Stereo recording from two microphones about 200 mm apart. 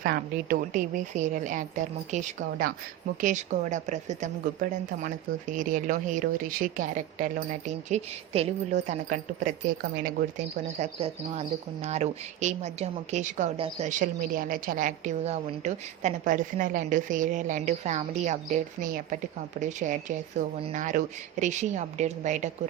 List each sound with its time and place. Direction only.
0.0 s speech: 50° right (ahead or behind)